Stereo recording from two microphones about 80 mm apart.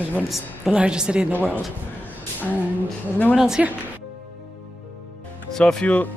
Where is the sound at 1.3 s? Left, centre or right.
Left.